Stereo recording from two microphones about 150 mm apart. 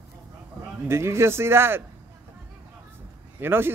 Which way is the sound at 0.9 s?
15° right (ahead or behind).